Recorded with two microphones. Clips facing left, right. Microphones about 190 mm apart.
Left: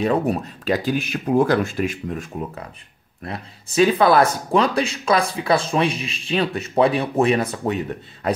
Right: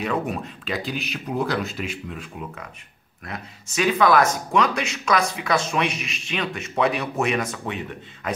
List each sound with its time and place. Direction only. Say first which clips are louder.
0.0 s speech: left 6 dB; 35° left (ahead or behind)
3.3 s speech: left 4 dB; 30° left (ahead or behind)